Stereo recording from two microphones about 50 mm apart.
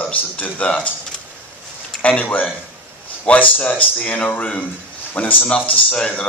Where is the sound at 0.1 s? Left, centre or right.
Left.